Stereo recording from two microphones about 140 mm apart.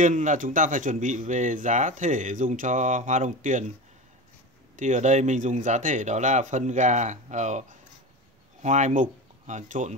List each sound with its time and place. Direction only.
0.0 s speech: 60° right (ahead or behind)
4.7 s speech: 60° right (ahead or behind)
8.6 s speech: 60° right (ahead or behind)